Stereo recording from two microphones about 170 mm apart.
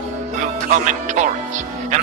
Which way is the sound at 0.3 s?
45° right (ahead or behind).